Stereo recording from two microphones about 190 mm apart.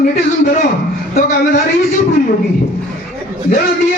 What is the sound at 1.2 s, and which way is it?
Speech, 40° left (ahead or behind).